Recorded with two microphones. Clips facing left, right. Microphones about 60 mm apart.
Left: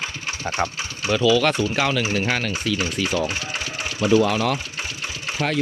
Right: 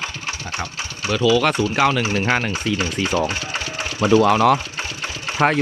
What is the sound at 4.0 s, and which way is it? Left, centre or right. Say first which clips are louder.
Speech: right 3 dB; right.